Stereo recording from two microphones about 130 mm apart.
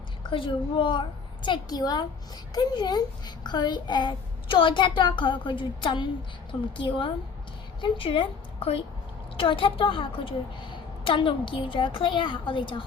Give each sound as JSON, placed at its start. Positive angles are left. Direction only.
{"t": 0.2, "sound": "a woman's voice", "side_deg": 40}